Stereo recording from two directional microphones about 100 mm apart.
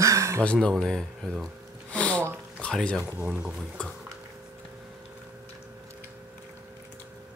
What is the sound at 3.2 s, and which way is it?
Speech, 10° right (ahead or behind).